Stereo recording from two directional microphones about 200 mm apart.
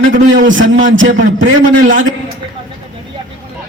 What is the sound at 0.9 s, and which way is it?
Speech, 70° right (ahead or behind).